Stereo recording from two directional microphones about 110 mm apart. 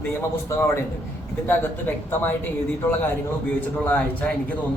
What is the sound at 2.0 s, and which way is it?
Speech, 20° left (ahead or behind).